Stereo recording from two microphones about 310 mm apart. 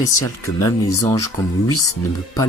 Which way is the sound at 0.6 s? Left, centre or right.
Centre.